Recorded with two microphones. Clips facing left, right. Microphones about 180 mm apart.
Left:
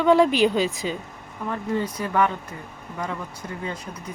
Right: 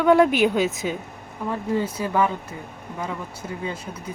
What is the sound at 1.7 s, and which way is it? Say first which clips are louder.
Speech: right 2 dB; 25° right (ahead or behind).